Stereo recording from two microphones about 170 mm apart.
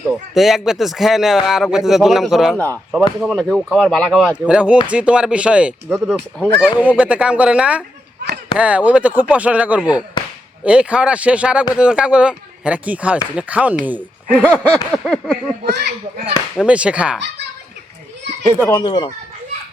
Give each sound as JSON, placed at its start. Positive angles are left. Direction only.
{"t": 0.1, "sound": "speech", "side_deg": 0}
{"t": 4.4, "sound": "speech", "side_deg": -5}
{"t": 5.9, "sound": "speech", "side_deg": 5}
{"t": 6.7, "sound": "speech", "side_deg": -10}
{"t": 14.3, "sound": "speech", "side_deg": 5}
{"t": 15.6, "sound": "a child's voice", "side_deg": -75}
{"t": 16.6, "sound": "speech", "side_deg": -5}
{"t": 18.7, "sound": "speech", "side_deg": 25}